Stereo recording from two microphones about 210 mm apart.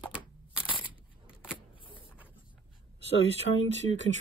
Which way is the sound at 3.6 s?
65° left (ahead or behind).